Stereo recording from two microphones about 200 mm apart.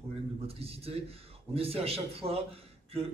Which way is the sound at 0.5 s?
30° right (ahead or behind).